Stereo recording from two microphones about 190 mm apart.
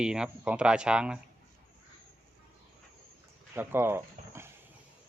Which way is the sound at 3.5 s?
10° right (ahead or behind).